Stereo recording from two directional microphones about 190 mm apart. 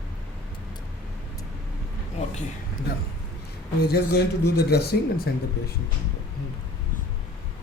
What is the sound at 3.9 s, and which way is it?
Speech, 60° left (ahead or behind).